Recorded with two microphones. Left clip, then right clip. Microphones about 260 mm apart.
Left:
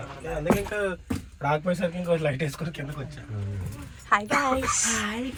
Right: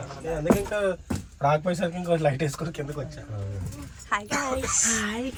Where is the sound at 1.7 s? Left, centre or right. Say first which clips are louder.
Even; right.